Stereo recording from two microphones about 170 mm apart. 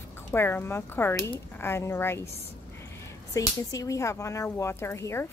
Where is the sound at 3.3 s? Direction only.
20° left (ahead or behind).